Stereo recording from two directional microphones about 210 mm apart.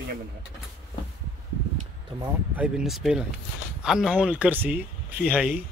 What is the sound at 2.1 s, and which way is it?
Speech, 25° right (ahead or behind).